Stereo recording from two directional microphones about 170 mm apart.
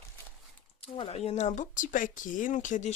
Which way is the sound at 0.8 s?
35° left (ahead or behind).